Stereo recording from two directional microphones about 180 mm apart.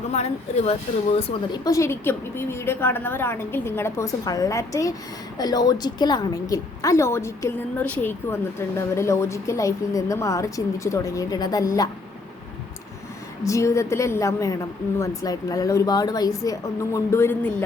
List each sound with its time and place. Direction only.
0.1 s speech: 35° left (ahead or behind)
1.6 s a woman's voice: 15° left (ahead or behind)
13.4 s a woman's voice: 15° left (ahead or behind)